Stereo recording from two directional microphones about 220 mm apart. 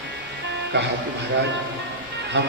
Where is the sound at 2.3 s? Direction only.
50° right (ahead or behind).